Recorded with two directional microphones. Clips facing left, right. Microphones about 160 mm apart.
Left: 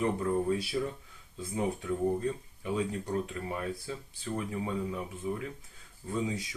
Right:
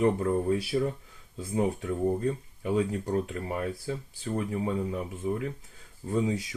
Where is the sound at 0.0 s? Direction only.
40° right (ahead or behind).